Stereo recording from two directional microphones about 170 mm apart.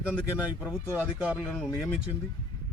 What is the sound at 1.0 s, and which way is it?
Speech, 5° right (ahead or behind).